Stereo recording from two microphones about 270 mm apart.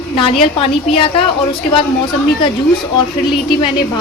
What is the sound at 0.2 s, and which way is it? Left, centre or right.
A woman's voice, centre.